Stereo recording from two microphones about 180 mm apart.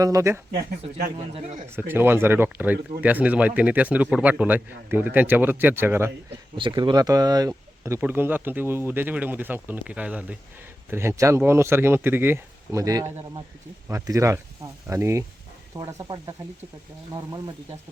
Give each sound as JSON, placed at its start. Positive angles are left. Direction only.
{"t": 0.0, "sound": "speech", "side_deg": -20}
{"t": 0.5, "sound": "speech", "side_deg": -60}
{"t": 1.3, "sound": "speech", "side_deg": -35}
{"t": 1.7, "sound": "speech", "side_deg": -10}
{"t": 6.6, "sound": "speech", "side_deg": -25}